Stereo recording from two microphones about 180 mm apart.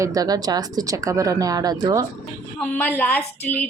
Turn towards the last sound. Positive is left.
turn(degrees=10)  # may be behind; listen again after turning